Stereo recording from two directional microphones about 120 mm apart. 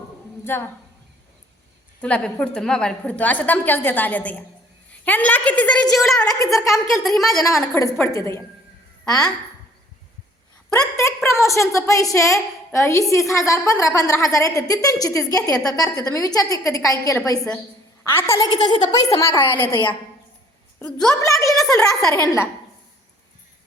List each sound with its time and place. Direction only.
0.4 s a woman's voice: 20° left (ahead or behind)
2.0 s a woman's voice: 10° left (ahead or behind)
5.8 s a woman's voice: 30° left (ahead or behind)
6.7 s a woman's voice: centre (ahead or behind)
7.7 s a woman's voice: 20° left (ahead or behind)
10.7 s a woman's voice: 25° left (ahead or behind)
18.4 s a woman's voice: 35° left (ahead or behind); by 21.2 s 10° left (ahead or behind)
21.2 s a woman's voice: 25° left (ahead or behind)
21.8 s a woman's voice: 5° left (ahead or behind)